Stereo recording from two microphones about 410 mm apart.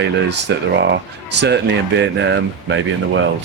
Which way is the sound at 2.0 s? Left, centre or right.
Right.